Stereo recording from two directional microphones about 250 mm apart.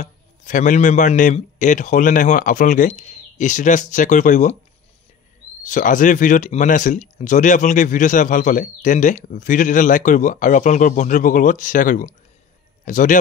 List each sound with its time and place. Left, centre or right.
0.0 s speech: left
5.6 s speech: left